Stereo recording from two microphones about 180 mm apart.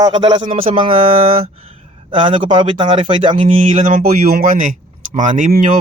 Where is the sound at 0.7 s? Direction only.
35° right (ahead or behind).